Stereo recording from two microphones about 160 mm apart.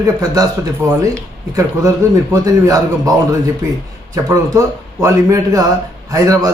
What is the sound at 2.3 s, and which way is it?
A man's voice, 20° right (ahead or behind).